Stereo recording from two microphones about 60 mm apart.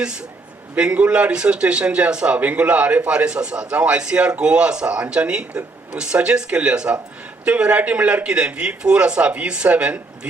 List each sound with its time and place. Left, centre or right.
0.8 s a man's voice: centre